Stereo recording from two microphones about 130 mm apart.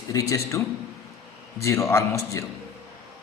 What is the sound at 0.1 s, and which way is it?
A man's voice, 25° left (ahead or behind).